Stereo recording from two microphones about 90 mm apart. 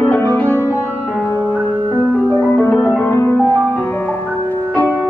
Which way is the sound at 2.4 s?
20° left (ahead or behind).